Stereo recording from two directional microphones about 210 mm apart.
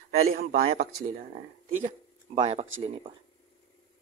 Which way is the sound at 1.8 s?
30° right (ahead or behind).